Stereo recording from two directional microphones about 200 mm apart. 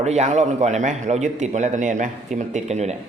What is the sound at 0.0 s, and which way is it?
Speech, 35° right (ahead or behind).